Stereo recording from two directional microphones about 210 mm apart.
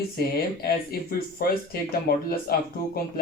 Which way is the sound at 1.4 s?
45° left (ahead or behind).